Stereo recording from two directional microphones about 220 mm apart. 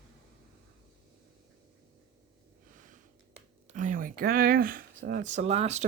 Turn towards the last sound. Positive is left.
turn(degrees=-30)  # may be behind; listen again after turning